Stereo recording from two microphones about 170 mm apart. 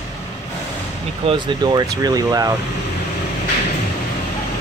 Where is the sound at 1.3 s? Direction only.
25° right (ahead or behind).